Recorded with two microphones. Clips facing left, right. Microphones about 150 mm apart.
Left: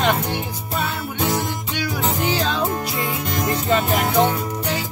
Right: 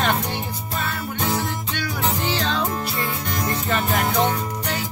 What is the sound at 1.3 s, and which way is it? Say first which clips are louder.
Music: left 1 dB; 15° left (ahead or behind).